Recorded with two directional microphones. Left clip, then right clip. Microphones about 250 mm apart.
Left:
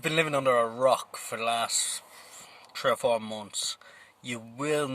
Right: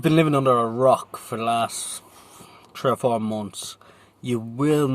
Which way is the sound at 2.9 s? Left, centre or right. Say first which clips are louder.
Right 4 dB; centre.